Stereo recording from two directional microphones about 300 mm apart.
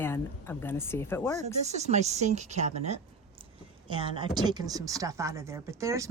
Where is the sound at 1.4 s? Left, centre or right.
Right.